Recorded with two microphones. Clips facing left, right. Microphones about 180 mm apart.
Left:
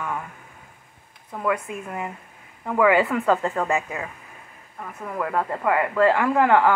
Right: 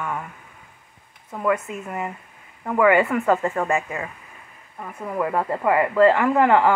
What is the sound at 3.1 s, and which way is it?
Speech, 15° right (ahead or behind).